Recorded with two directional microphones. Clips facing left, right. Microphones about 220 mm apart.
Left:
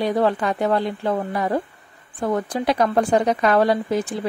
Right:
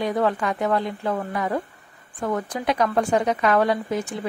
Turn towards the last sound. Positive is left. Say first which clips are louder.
# left 3 dB
turn(degrees=35)  # may be behind; listen again after turning